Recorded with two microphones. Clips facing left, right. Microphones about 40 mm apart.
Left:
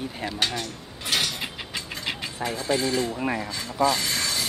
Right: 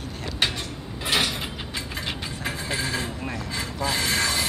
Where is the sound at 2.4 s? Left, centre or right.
Centre.